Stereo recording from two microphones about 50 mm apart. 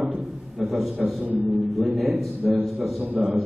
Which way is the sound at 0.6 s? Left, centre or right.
Centre.